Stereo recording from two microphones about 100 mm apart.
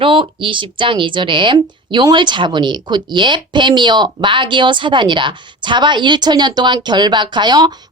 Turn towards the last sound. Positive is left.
turn(degrees=-45)  # may be behind; listen again after turning